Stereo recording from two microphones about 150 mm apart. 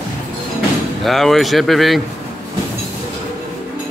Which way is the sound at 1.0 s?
Centre (ahead or behind).